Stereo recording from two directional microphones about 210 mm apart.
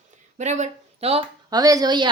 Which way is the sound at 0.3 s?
35° right (ahead or behind).